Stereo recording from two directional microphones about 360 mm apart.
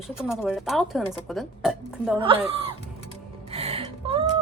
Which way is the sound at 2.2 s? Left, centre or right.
Centre.